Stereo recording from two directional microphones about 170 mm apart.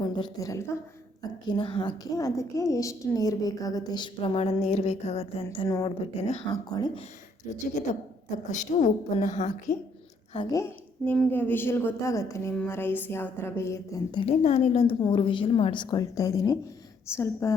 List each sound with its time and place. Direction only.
0.0 s a woman's voice: 25° left (ahead or behind)
1.5 s a woman's voice: 30° left (ahead or behind)
5.6 s a woman's voice: 20° left (ahead or behind)
6.1 s speech: 40° left (ahead or behind)
6.5 s a woman's voice: 25° left (ahead or behind)
7.6 s a woman's voice: 45° left (ahead or behind)
10.5 s a woman's voice: 15° left (ahead or behind)